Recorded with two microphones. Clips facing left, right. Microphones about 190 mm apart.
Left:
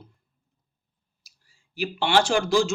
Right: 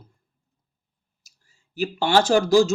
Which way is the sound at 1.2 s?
45° right (ahead or behind).